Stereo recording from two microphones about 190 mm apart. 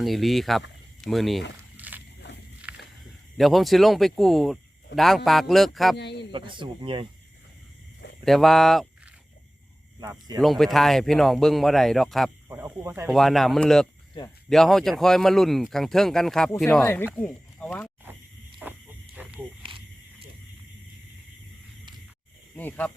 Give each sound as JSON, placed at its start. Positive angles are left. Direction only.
{"t": 0.0, "sound": "speech", "side_deg": 0}
{"t": 1.7, "sound": "a sound", "side_deg": -10}
{"t": 3.3, "sound": "speech", "side_deg": 0}
{"t": 6.0, "sound": "speech", "side_deg": 65}
{"t": 6.3, "sound": "speech", "side_deg": -25}
{"t": 8.2, "sound": "speech", "side_deg": 0}
{"t": 10.4, "sound": "speech", "side_deg": 0}
{"t": 12.5, "sound": "speech", "side_deg": -15}
{"t": 13.1, "sound": "speech", "side_deg": 0}
{"t": 18.6, "sound": "a sound", "side_deg": -5}
{"t": 19.1, "sound": "snake", "side_deg": -10}
{"t": 22.5, "sound": "speech", "side_deg": 10}